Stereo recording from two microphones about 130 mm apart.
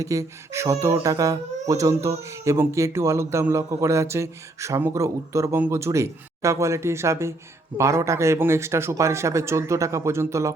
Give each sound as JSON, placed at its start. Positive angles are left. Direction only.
{"t": 0.0, "sound": "speech", "side_deg": -25}